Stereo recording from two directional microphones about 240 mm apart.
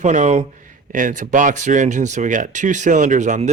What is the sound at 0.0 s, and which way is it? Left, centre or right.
Speech, right.